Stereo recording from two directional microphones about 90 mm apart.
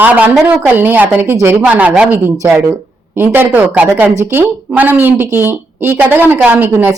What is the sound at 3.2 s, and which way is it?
A woman's voice, 20° right (ahead or behind).